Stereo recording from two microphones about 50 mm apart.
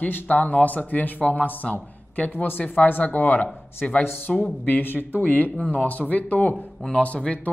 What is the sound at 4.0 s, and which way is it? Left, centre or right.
Speech, left.